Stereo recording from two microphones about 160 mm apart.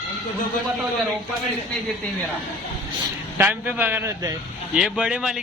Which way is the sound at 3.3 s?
10° right (ahead or behind).